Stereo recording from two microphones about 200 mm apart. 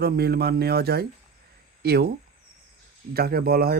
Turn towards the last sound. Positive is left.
turn(degrees=-50)  # may be behind; listen again after turning